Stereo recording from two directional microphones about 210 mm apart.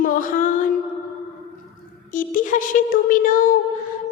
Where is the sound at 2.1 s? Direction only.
40° left (ahead or behind).